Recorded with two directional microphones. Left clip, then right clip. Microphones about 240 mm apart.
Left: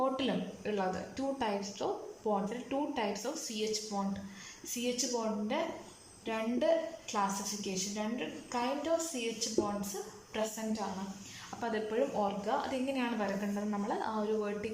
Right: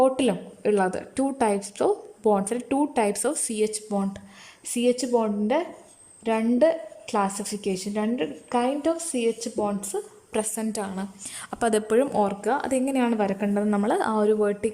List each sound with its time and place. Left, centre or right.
0.0 s a woman's voice: right